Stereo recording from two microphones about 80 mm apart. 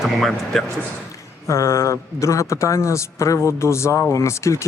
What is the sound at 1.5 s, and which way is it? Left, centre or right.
Speech, left.